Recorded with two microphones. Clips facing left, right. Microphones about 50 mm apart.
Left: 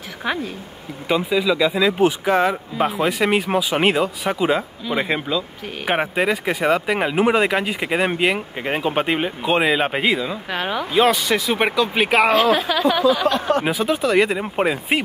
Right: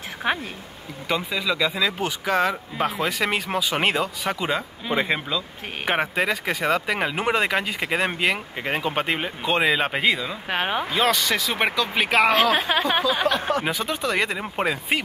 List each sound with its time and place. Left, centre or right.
0.2 s speech: right
1.0 s speech: centre
10.5 s speech: right
10.9 s speech: centre
12.4 s a woman's voice: right
13.7 s speech: centre